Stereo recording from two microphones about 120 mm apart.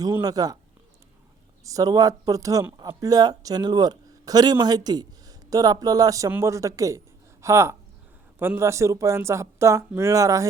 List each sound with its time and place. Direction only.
0.0 s speech: 30° right (ahead or behind)
1.6 s speech: 30° right (ahead or behind)